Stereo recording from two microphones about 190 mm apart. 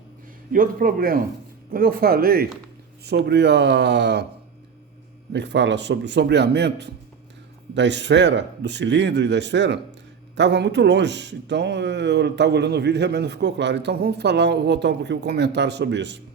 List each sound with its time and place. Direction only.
0.5 s a man's voice: 50° right (ahead or behind); by 4.3 s 65° right (ahead or behind)
5.3 s a man's voice: 65° right (ahead or behind)